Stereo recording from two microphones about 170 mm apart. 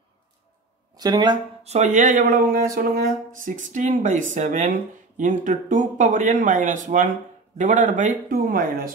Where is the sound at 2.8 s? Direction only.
55° right (ahead or behind).